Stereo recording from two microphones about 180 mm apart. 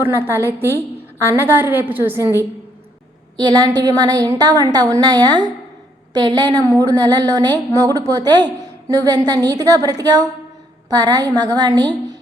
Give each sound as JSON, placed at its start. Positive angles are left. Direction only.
{"t": 0.0, "sound": "a woman's voice", "side_deg": -15}